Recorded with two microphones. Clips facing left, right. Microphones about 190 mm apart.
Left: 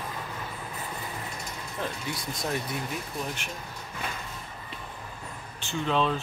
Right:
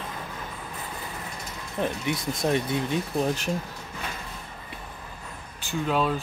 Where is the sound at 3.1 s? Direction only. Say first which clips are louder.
Right 9 dB; 40° right (ahead or behind).